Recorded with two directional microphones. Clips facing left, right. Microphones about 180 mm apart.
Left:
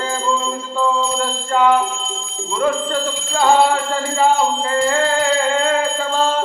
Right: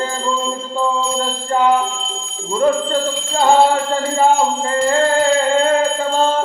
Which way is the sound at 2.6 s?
30° right (ahead or behind).